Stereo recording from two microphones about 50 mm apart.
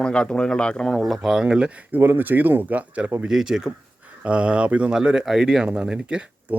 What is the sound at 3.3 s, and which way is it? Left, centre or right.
Speech, centre.